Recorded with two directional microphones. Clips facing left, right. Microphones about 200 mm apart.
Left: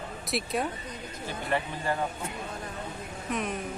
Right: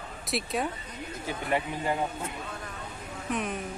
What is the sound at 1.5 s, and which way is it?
Speech, 15° right (ahead or behind).